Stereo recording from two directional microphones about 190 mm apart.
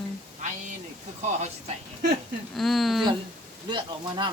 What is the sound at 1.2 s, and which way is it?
Speech, 35° right (ahead or behind).